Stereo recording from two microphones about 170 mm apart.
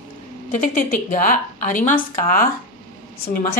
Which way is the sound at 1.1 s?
50° left (ahead or behind).